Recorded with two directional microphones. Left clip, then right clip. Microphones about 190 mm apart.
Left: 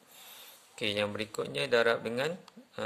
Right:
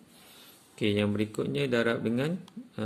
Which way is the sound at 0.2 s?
20° left (ahead or behind).